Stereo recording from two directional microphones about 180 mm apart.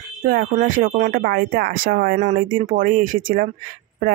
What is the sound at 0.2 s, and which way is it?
Speech, 50° right (ahead or behind).